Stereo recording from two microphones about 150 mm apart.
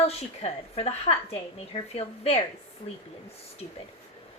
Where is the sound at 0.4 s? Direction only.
45° left (ahead or behind).